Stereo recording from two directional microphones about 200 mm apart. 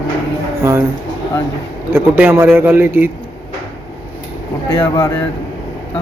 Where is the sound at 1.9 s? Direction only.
10° right (ahead or behind).